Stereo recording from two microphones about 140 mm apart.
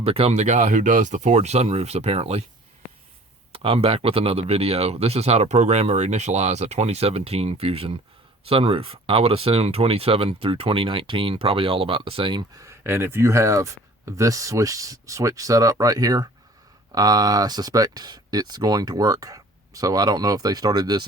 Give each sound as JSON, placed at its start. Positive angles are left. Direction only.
{"t": 0.0, "sound": "speech", "side_deg": -45}
{"t": 3.5, "sound": "speech", "side_deg": -45}
{"t": 12.5, "sound": "speech", "side_deg": -20}